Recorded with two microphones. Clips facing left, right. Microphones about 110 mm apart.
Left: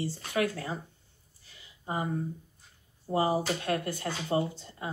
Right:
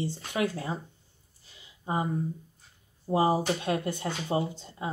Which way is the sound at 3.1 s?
20° right (ahead or behind).